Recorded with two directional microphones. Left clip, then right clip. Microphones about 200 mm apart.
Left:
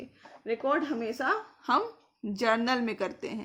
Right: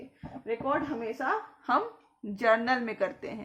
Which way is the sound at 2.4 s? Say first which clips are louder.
Right 2 dB; 30° left (ahead or behind).